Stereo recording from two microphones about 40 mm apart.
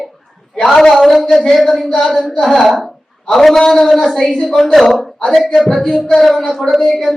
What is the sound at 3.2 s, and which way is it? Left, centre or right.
A man's voice, centre.